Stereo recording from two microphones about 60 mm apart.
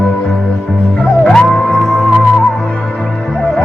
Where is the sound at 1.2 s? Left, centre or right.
Centre.